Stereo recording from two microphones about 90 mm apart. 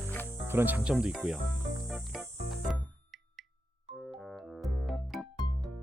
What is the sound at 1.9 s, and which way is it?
Music, centre (ahead or behind).